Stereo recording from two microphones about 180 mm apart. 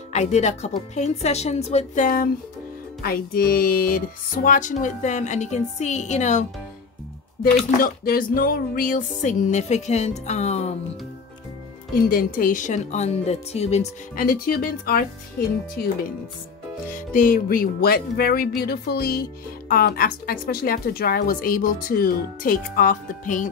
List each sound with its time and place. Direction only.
0.1 s speech: 40° left (ahead or behind)
3.0 s a woman's voice: 55° left (ahead or behind); by 6.4 s 40° left (ahead or behind)
7.5 s speech: 50° left (ahead or behind)
12.1 s speech: 50° left (ahead or behind)
14.1 s a woman's voice: 50° left (ahead or behind)
15.8 s music: 60° left (ahead or behind)
17.1 s music: 50° left (ahead or behind)
19.7 s a woman's voice: 55° left (ahead or behind)